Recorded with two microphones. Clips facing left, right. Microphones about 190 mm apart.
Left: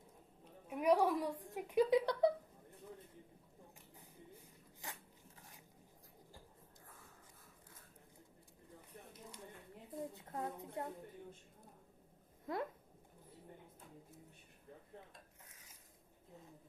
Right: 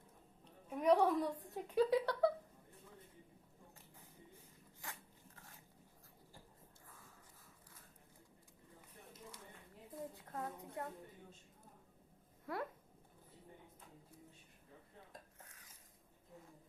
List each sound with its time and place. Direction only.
0.7 s a woman's voice: 10° left (ahead or behind)
4.8 s dog: 20° left (ahead or behind)
9.9 s a woman's voice: 20° left (ahead or behind)